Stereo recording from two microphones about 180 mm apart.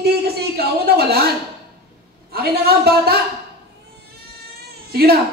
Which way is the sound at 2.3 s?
60° right (ahead or behind).